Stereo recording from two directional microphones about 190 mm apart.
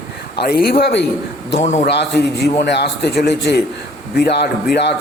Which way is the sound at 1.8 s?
65° left (ahead or behind).